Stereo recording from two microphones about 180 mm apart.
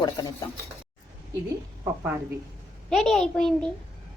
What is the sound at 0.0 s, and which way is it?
Speech, 20° left (ahead or behind).